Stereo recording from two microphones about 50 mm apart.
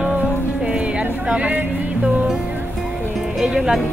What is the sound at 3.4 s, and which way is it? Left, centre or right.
Speech, centre.